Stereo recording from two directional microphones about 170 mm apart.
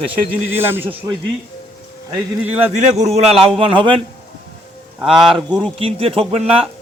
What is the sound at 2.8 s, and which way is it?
A man's voice, 40° right (ahead or behind).